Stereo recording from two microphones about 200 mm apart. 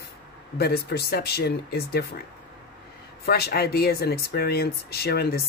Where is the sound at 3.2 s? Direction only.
50° left (ahead or behind).